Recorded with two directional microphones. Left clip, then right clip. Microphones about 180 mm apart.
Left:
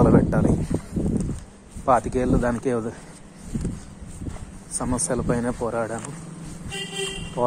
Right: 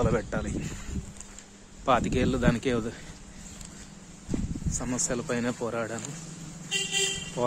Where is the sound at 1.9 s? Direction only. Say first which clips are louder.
Left 5 dB; 35° right (ahead or behind).